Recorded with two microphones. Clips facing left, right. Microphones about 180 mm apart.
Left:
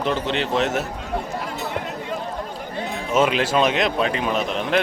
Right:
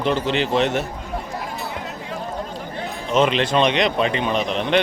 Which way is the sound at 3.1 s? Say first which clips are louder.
Right 1 dB; 5° left (ahead or behind).